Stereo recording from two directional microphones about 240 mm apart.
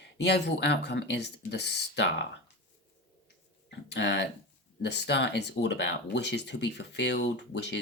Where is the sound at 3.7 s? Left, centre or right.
Left.